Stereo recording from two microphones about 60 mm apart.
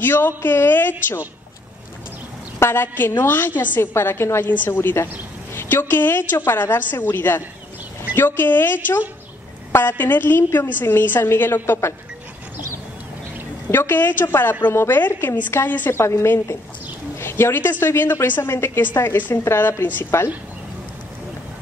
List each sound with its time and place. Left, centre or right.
0.0 s a woman's voice: left
2.6 s a woman's voice: left
3.8 s a woman's voice: left
13.7 s a woman's voice: left
16.0 s a woman's voice: left
17.2 s a sound: left
17.6 s a woman's voice: left
19.4 s a woman's voice: left